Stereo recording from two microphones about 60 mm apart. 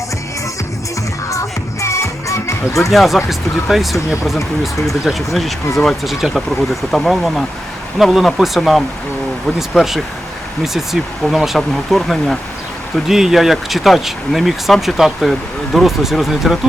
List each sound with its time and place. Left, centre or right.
1.3 s music: left
2.9 s speech: centre
6.1 s speech: centre